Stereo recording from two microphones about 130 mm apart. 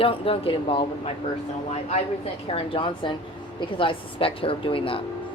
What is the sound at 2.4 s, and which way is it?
A woman's voice, 45° left (ahead or behind).